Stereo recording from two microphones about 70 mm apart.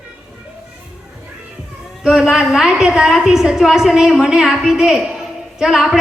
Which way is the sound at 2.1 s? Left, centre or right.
Centre.